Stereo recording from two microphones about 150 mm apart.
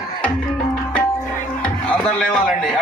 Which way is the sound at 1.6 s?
5° left (ahead or behind).